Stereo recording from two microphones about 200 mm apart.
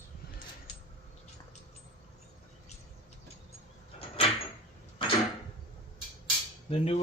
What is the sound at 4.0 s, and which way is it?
Door, 30° left (ahead or behind).